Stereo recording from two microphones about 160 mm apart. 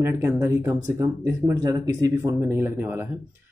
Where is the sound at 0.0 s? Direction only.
15° right (ahead or behind).